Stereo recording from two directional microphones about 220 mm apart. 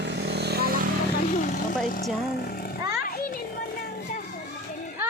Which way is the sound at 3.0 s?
40° left (ahead or behind).